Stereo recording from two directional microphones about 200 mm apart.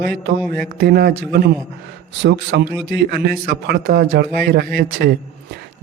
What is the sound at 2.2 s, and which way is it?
A man's voice, 60° right (ahead or behind).